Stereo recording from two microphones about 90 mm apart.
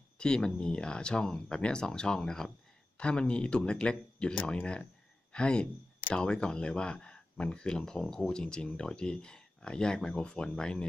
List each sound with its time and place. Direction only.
0.2 s speech: 10° left (ahead or behind)